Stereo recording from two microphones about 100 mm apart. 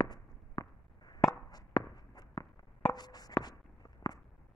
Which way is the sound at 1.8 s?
15° left (ahead or behind).